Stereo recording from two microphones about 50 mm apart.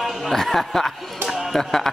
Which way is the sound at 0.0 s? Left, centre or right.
Centre.